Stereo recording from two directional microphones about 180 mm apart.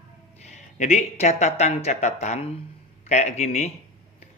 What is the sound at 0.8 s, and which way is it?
Speech, 40° left (ahead or behind).